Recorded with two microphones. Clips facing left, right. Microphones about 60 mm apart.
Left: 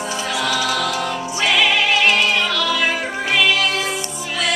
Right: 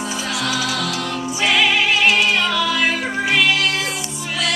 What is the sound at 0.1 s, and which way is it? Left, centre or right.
Music, centre.